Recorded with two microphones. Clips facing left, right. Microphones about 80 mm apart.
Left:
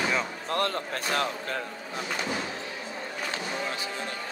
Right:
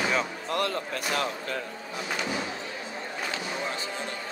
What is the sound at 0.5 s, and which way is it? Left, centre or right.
Speech, left.